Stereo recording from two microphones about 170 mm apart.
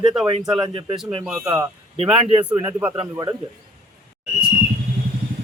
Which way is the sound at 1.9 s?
35° right (ahead or behind).